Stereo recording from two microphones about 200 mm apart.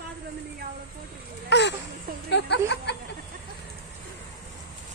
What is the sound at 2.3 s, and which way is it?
Speech, 55° left (ahead or behind).